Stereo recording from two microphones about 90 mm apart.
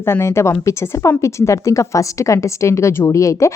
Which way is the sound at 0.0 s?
30° left (ahead or behind).